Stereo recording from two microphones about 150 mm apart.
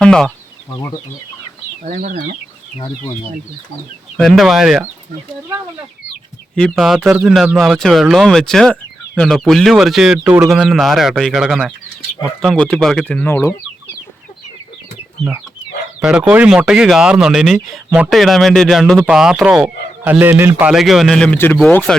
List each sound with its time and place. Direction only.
0.0 s a sound: 5° left (ahead or behind)
1.8 s speech: 60° right (ahead or behind)
4.2 s speech: centre (ahead or behind)
6.6 s speech: centre (ahead or behind)
16.0 s speech: 5° right (ahead or behind)